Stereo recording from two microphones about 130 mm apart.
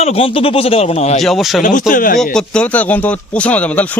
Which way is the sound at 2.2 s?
5° left (ahead or behind).